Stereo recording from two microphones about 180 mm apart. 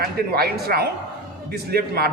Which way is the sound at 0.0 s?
60° right (ahead or behind).